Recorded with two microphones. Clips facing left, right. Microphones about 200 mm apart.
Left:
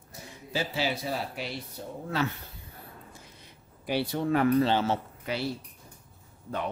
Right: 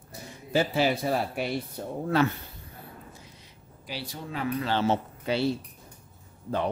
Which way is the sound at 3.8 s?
60° left (ahead or behind).